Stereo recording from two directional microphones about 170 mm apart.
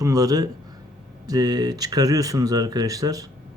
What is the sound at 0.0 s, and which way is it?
Speech, 20° right (ahead or behind).